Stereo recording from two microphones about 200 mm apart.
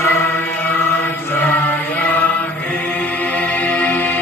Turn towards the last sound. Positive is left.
turn(degrees=10)  # may be behind; listen again after turning